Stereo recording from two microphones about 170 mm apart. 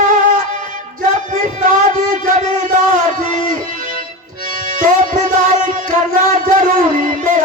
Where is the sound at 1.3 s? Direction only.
50° right (ahead or behind).